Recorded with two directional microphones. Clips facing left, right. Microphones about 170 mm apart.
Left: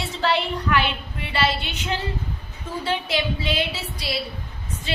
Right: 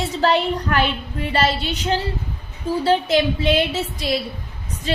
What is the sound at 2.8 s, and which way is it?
A woman's voice, 45° right (ahead or behind).